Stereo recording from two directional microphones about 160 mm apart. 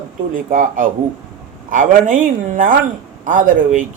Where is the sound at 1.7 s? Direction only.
55° right (ahead or behind).